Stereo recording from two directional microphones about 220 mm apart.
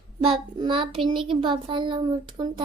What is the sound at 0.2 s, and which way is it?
Child singing, 25° right (ahead or behind).